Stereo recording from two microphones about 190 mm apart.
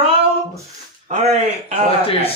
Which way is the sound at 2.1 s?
30° left (ahead or behind).